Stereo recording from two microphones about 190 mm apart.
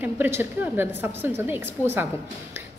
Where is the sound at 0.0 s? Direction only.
10° right (ahead or behind).